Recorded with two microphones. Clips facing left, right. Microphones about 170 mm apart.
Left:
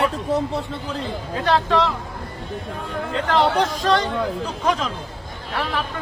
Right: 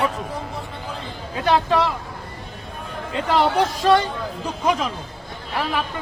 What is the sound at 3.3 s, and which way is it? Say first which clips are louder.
Speech: even; 10° right (ahead or behind).